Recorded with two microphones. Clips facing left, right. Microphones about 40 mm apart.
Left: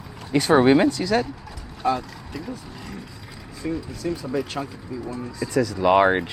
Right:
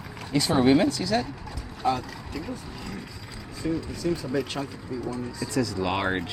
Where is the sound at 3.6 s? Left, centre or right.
Centre.